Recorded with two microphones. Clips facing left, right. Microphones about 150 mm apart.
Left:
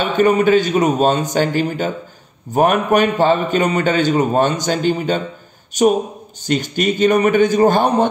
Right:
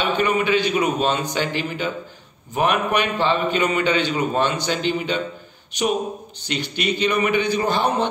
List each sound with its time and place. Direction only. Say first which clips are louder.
0.0 s a man's voice: left 7 dB; 40° left (ahead or behind)